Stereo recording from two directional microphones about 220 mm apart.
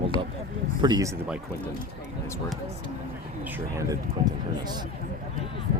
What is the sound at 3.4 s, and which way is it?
Speech, 15° right (ahead or behind).